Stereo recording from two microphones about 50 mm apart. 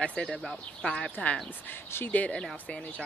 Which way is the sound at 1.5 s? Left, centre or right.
Left.